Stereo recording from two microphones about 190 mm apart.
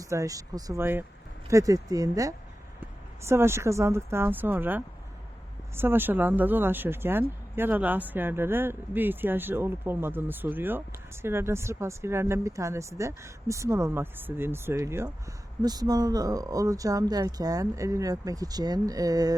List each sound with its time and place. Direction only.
0.0 s speech: 15° right (ahead or behind)